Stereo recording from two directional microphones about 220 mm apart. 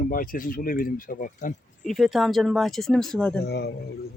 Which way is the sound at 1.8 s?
Centre (ahead or behind).